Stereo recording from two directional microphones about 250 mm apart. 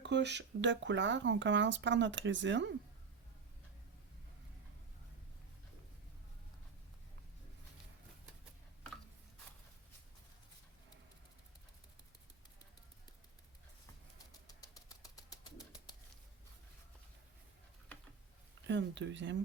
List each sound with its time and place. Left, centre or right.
0.0 s speech: right
14.4 s a sound: centre
18.7 s speech: right